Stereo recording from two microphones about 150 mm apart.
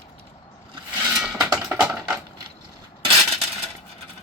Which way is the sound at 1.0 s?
5° right (ahead or behind).